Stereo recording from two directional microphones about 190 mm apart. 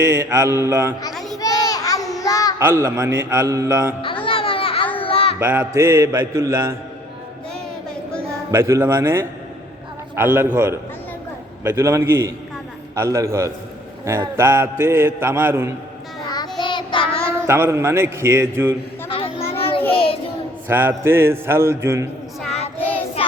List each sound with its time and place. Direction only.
0.0 s a man's voice: 15° right (ahead or behind)
1.1 s children playing: centre (ahead or behind)
1.4 s child singing: 20° left (ahead or behind)
2.6 s a man's voice: 15° right (ahead or behind)
4.0 s music: 25° left (ahead or behind)
5.0 s a sound: 30° left (ahead or behind)
5.4 s a man's voice: 10° right (ahead or behind)
8.4 s a man's voice: 15° right (ahead or behind)
16.3 s child singing: 20° left (ahead or behind)
17.4 s a man's voice: 15° right (ahead or behind)
19.0 s children playing: 30° left (ahead or behind)
19.9 s child singing: 30° left (ahead or behind)
20.7 s a man's voice: 10° right (ahead or behind)